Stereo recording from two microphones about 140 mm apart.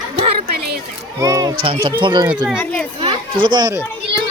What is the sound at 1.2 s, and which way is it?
A man's voice, 25° right (ahead or behind).